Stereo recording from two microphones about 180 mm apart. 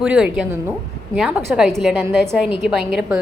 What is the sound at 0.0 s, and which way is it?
A woman's voice, 5° right (ahead or behind).